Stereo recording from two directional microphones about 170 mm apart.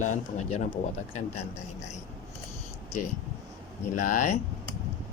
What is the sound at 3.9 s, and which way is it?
Speech, 50° left (ahead or behind).